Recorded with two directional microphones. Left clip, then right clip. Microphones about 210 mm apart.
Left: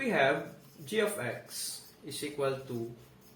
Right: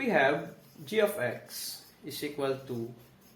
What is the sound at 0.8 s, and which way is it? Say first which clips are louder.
Speech: right 4 dB; 40° right (ahead or behind).